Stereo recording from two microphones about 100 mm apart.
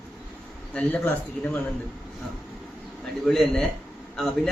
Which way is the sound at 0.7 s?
15° left (ahead or behind).